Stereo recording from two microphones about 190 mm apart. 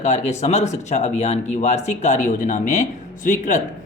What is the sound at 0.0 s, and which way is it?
A man's voice, 35° left (ahead or behind).